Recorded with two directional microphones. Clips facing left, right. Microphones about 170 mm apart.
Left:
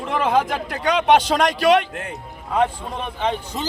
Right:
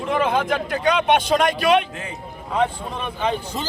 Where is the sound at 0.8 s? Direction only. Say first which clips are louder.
Left 2 dB; 85° left; by 2.1 s 70° left (ahead or behind).